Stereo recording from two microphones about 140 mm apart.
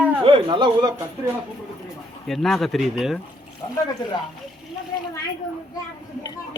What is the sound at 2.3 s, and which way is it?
Speech, centre (ahead or behind).